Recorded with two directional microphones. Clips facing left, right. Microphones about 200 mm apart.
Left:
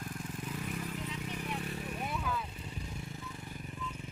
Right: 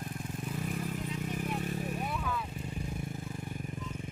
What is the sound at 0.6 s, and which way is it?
Vehicle, 45° right (ahead or behind).